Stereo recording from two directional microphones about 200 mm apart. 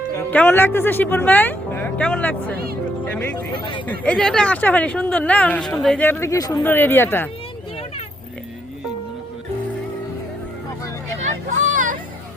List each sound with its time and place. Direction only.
0.3 s speech: 10° left (ahead or behind)
3.5 s speech: 25° left (ahead or behind)
4.0 s speech: 5° left (ahead or behind)
11.5 s hubbub: 40° right (ahead or behind)